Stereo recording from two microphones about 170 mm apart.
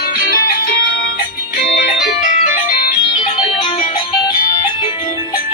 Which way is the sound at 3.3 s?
30° left (ahead or behind).